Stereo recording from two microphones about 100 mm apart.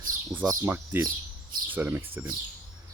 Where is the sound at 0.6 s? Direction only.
20° right (ahead or behind).